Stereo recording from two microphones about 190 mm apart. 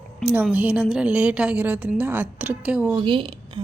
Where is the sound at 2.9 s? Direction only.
25° right (ahead or behind).